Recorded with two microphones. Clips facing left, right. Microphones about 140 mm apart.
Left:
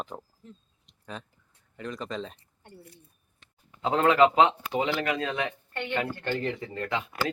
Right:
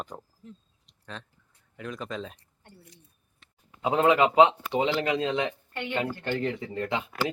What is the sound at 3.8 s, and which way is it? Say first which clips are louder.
Speech: left 1 dB; 15° right (ahead or behind).